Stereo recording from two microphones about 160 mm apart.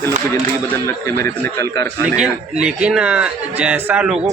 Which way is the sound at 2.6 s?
5° right (ahead or behind).